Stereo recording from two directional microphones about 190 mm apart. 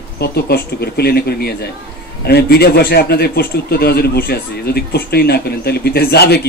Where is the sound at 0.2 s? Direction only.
55° left (ahead or behind).